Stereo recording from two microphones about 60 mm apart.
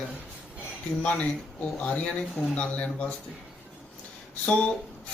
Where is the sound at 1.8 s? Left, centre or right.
Left.